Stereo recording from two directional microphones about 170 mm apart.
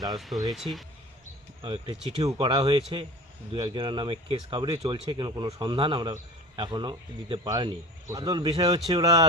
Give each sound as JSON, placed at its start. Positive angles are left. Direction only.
{"t": 0.5, "sound": "speech", "side_deg": 0}
{"t": 1.6, "sound": "speech", "side_deg": -35}